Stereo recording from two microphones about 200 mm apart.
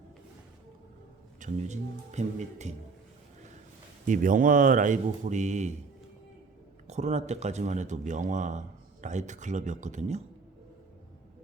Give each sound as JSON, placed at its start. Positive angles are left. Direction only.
{"t": 1.4, "sound": "speech", "side_deg": -35}
{"t": 4.0, "sound": "speech", "side_deg": -40}
{"t": 6.8, "sound": "speech", "side_deg": -35}